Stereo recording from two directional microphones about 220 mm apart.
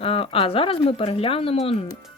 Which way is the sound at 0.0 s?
25° left (ahead or behind).